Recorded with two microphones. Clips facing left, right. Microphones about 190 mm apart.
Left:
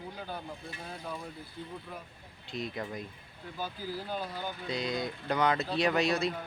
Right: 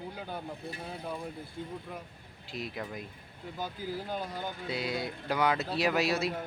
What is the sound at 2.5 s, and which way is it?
Speech, 5° right (ahead or behind).